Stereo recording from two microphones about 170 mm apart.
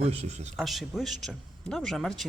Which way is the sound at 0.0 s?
35° right (ahead or behind).